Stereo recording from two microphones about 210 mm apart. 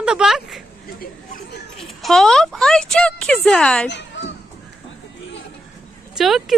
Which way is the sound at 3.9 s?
55° left (ahead or behind).